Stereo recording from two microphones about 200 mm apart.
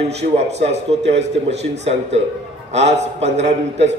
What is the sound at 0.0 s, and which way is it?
A man's voice, 30° right (ahead or behind).